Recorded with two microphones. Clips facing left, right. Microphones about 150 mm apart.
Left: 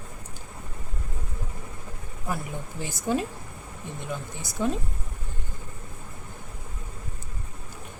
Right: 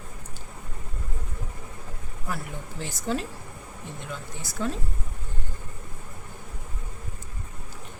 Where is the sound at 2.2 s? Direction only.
15° left (ahead or behind).